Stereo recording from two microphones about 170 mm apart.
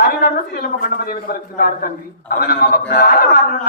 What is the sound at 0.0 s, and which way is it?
Speech, 60° left (ahead or behind).